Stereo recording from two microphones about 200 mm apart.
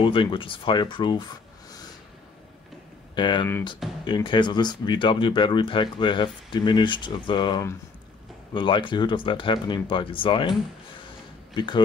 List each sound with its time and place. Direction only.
0.0 s speech: 25° left (ahead or behind)
3.2 s speech: 25° left (ahead or behind)
11.5 s speech: 20° left (ahead or behind)